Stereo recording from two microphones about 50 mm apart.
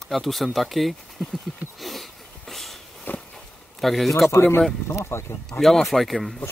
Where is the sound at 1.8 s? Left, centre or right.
Centre.